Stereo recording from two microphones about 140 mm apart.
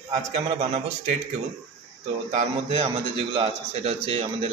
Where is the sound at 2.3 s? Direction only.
45° right (ahead or behind).